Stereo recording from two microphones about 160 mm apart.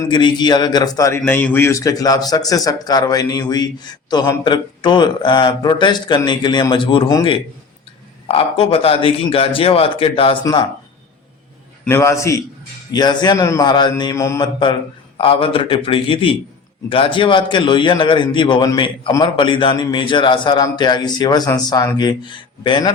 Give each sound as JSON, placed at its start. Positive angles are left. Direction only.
{"t": 0.0, "sound": "a man's voice", "side_deg": 30}
{"t": 10.4, "sound": "a man's voice", "side_deg": 25}
{"t": 11.9, "sound": "a man's voice", "side_deg": 15}